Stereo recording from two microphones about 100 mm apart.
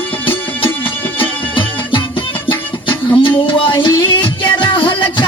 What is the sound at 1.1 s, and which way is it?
Music, 55° left (ahead or behind).